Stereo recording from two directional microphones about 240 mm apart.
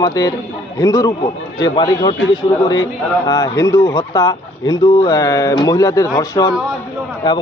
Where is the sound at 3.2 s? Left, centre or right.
Centre.